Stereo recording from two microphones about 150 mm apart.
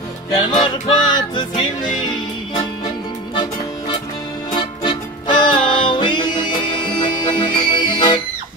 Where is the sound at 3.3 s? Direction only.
30° left (ahead or behind).